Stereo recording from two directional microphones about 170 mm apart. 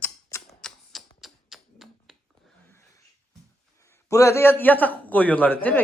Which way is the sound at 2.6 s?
15° left (ahead or behind).